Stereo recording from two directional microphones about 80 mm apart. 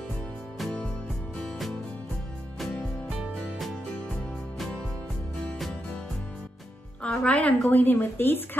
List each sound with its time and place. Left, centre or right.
1.4 s music: centre
7.0 s a woman's voice: centre
7.7 s a woman's voice: left